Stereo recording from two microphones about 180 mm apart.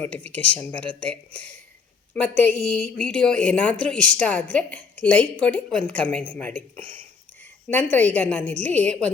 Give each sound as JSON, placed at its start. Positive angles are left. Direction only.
{"t": 0.1, "sound": "a woman's voice", "side_deg": 10}
{"t": 6.7, "sound": "speech", "side_deg": -30}
{"t": 7.7, "sound": "a woman's voice", "side_deg": 10}